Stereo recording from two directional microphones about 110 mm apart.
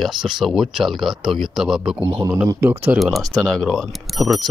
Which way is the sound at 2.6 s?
25° right (ahead or behind).